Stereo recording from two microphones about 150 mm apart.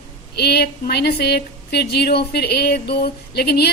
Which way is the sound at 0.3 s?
90° left.